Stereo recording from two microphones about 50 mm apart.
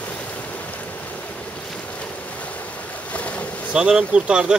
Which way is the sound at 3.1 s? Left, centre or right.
Left.